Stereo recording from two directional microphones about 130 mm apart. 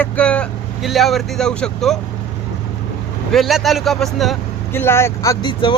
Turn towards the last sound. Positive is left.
turn(degrees=40)  # may be behind; listen again after turning